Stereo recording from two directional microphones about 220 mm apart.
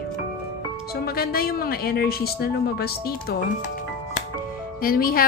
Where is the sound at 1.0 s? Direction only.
45° left (ahead or behind).